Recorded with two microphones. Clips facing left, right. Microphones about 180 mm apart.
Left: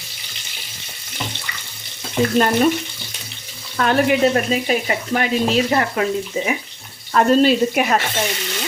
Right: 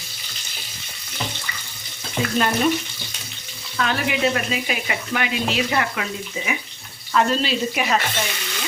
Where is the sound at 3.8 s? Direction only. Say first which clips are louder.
Left 7 dB; 45° left (ahead or behind).